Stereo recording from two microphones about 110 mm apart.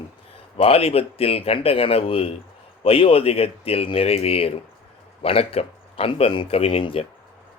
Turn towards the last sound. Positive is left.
turn(degrees=55)  # may be behind; listen again after turning